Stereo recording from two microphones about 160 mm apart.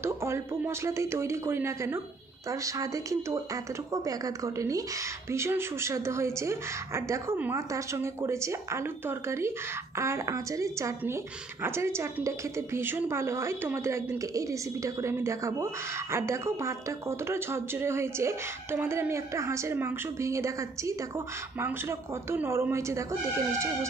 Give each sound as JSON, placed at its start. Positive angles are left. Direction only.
{"t": 0.0, "sound": "a woman's voice", "side_deg": -15}
{"t": 4.6, "sound": "a woman's voice", "side_deg": -20}
{"t": 9.9, "sound": "a woman's voice", "side_deg": -15}
{"t": 22.3, "sound": "a woman's voice", "side_deg": -15}